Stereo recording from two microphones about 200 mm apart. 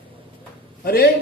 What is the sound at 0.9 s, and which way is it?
Speech, 50° left (ahead or behind).